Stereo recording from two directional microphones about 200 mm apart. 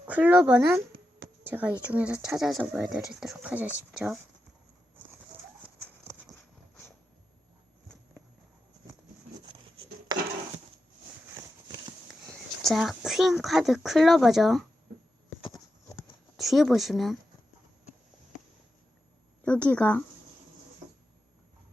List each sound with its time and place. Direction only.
0.1 s speech: 5° right (ahead or behind)
5.6 s clip-clop: 5° right (ahead or behind)
12.6 s speech: centre (ahead or behind)
15.4 s clip-clop: 20° left (ahead or behind)
16.0 s a sound: centre (ahead or behind)
19.5 s speech: 5° left (ahead or behind)